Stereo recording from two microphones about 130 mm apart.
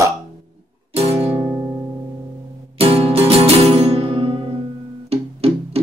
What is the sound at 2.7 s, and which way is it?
Music, 50° right (ahead or behind).